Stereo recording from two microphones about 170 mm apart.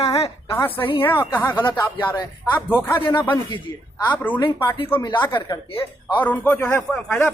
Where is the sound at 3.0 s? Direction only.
30° left (ahead or behind).